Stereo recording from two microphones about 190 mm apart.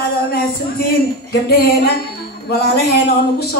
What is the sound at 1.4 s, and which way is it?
A woman's voice, 55° left (ahead or behind).